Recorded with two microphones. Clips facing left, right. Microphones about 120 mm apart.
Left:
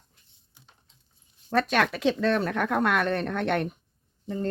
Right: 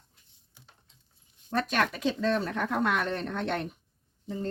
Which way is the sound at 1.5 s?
90° left.